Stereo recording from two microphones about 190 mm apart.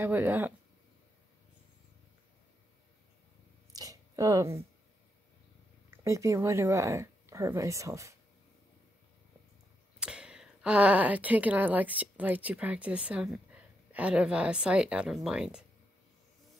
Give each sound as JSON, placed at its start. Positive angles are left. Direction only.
{"t": 0.0, "sound": "speech", "side_deg": -10}
{"t": 3.7, "sound": "a sound", "side_deg": -20}
{"t": 5.9, "sound": "speech", "side_deg": -15}
{"t": 9.9, "sound": "speech", "side_deg": -5}